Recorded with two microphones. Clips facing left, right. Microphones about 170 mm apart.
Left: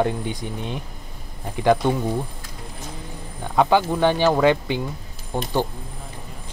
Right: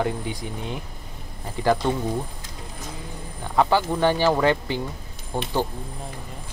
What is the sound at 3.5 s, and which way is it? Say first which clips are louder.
Speech: left 2 dB; 15° left (ahead or behind).